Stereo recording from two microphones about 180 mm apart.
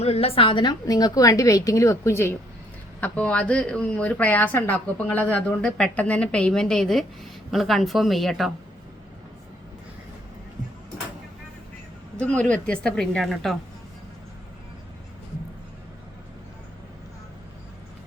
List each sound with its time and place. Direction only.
0.0 s a woman's voice: 35° left (ahead or behind); by 8.5 s centre (ahead or behind)
12.2 s speech: 5° left (ahead or behind)